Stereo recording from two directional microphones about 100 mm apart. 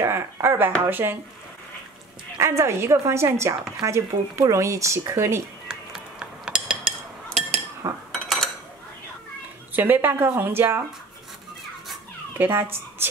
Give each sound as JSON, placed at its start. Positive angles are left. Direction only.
{"t": 0.0, "sound": "speech", "side_deg": -25}
{"t": 2.3, "sound": "speech", "side_deg": -30}
{"t": 5.7, "sound": "a sound", "side_deg": -10}
{"t": 8.1, "sound": "dishes", "side_deg": 0}
{"t": 9.8, "sound": "speech", "side_deg": -20}
{"t": 12.4, "sound": "speech", "side_deg": -20}